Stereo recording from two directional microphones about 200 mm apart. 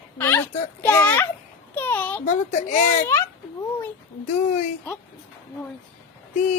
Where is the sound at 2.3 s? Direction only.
40° left (ahead or behind).